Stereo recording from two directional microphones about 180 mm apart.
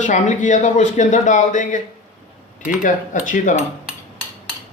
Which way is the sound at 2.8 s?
45° left (ahead or behind).